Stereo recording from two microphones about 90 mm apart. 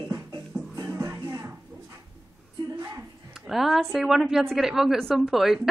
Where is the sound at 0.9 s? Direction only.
35° right (ahead or behind).